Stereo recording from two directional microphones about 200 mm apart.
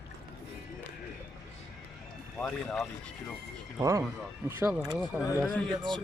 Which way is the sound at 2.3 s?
5° left (ahead or behind).